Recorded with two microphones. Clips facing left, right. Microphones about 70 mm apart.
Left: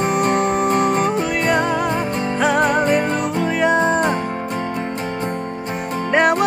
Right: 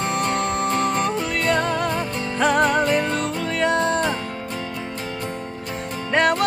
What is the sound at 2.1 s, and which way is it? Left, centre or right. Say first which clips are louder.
Music: left 5 dB; left.